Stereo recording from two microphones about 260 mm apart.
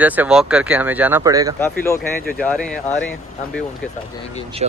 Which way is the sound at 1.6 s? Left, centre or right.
Centre.